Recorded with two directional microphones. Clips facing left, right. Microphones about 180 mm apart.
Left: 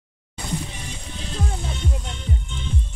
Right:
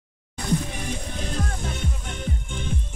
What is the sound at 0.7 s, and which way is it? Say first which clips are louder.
Music: right 5 dB; 50° right (ahead or behind).